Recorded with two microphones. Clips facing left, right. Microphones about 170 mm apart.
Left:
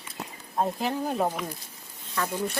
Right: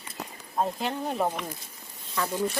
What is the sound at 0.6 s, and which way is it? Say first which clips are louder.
Speech: left 1 dB; 5° left (ahead or behind).